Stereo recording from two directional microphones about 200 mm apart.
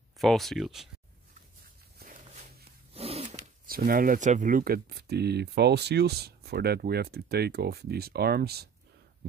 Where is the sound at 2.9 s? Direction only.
30° right (ahead or behind).